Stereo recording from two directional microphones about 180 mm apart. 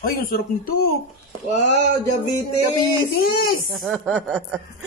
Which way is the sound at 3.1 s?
55° left (ahead or behind).